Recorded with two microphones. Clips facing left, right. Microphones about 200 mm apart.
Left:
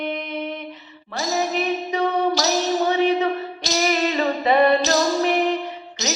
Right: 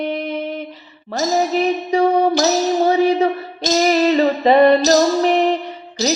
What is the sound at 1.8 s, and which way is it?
Music, 35° right (ahead or behind).